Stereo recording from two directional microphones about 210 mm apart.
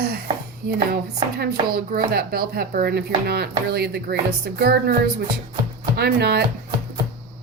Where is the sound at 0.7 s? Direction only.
50° right (ahead or behind).